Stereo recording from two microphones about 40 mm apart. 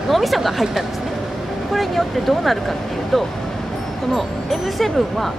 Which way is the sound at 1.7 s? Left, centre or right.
Centre.